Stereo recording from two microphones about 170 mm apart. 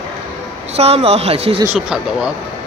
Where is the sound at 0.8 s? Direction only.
35° right (ahead or behind).